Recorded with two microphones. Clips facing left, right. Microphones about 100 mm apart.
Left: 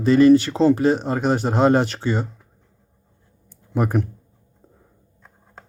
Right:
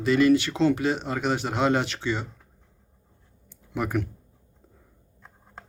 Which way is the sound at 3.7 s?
40° left (ahead or behind).